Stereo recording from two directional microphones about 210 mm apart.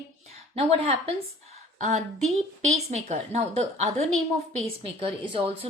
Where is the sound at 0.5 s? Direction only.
30° right (ahead or behind).